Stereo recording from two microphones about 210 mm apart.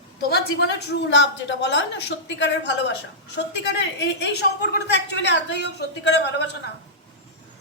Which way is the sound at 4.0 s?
55° left (ahead or behind).